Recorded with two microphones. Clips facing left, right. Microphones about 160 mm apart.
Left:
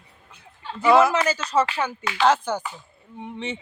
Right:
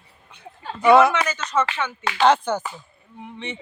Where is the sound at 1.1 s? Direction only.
30° left (ahead or behind).